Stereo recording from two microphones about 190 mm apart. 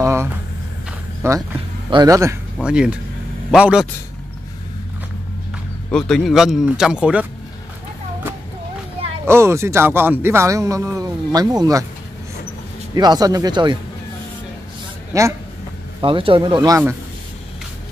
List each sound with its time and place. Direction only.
0.0 s a sound: 15° right (ahead or behind)
1.2 s speech: 15° right (ahead or behind)
2.6 s speech: 5° right (ahead or behind)
5.9 s speech: 5° left (ahead or behind)
9.2 s speech: 15° right (ahead or behind)
12.9 s speech: 20° right (ahead or behind)
15.1 s speech: 15° right (ahead or behind)
16.0 s speech: 25° right (ahead or behind)